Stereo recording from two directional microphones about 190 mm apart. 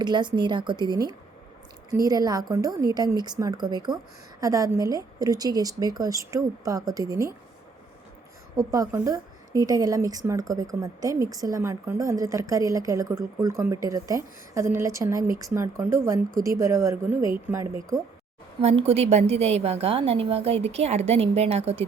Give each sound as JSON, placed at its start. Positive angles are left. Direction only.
{"t": 0.0, "sound": "a woman's voice", "side_deg": -25}
{"t": 8.5, "sound": "a woman's voice", "side_deg": -20}
{"t": 18.6, "sound": "a woman's voice", "side_deg": -35}